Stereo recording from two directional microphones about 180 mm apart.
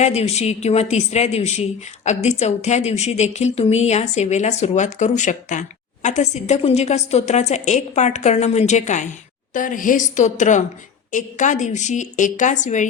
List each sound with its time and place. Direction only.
0.0 s a woman's voice: 35° left (ahead or behind)